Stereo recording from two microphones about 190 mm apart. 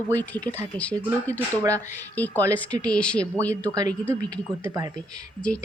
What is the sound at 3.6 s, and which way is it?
Speech, 20° right (ahead or behind).